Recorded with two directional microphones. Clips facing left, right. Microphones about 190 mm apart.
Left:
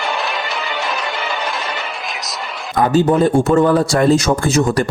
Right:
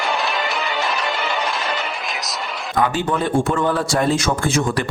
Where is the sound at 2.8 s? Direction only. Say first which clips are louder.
Left 8 dB; 40° left (ahead or behind).